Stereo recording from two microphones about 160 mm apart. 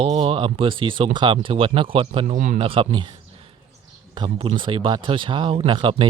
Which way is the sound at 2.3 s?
55° right (ahead or behind).